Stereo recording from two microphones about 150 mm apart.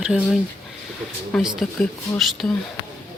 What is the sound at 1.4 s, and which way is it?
Speech, centre (ahead or behind).